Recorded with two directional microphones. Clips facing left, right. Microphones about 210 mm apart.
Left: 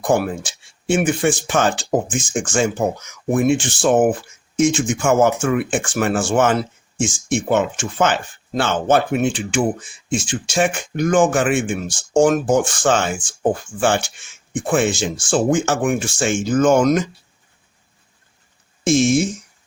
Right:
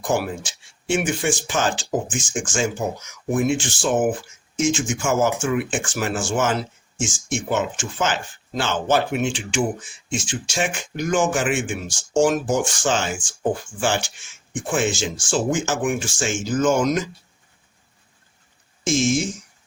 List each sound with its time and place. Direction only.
0.0 s speech: 55° left (ahead or behind)
18.9 s speech: 60° left (ahead or behind)